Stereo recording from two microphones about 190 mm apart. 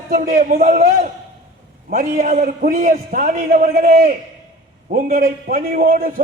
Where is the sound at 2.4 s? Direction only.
50° right (ahead or behind).